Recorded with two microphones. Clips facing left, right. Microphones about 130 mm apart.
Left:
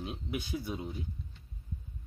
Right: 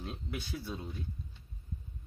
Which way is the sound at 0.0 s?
15° left (ahead or behind).